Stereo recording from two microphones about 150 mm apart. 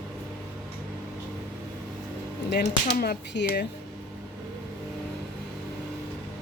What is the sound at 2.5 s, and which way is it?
Speech, 90° left.